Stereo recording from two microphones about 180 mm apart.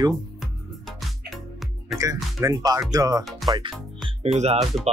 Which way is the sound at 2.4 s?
20° right (ahead or behind).